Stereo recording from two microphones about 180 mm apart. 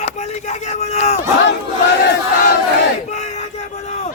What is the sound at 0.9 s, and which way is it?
Battle cry, 40° left (ahead or behind).